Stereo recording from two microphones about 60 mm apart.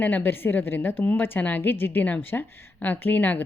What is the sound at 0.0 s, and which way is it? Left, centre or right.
A woman's voice, left.